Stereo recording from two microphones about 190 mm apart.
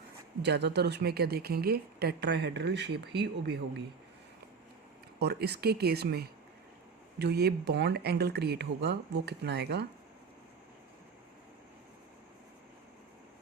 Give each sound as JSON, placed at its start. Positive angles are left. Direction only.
{"t": 0.4, "sound": "a woman's voice", "side_deg": -60}
{"t": 5.2, "sound": "a woman's voice", "side_deg": -60}